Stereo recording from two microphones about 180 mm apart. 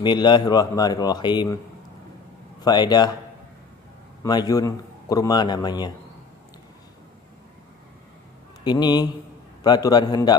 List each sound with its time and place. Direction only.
0.0 s a man's voice: 25° left (ahead or behind)
2.6 s a man's voice: 25° left (ahead or behind)
4.2 s a man's voice: 20° left (ahead or behind)
8.6 s a man's voice: 25° left (ahead or behind)